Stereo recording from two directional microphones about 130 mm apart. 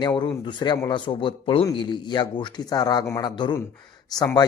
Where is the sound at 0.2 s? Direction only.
35° left (ahead or behind).